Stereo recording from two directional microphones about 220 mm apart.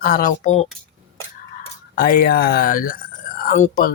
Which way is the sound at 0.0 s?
40° left (ahead or behind).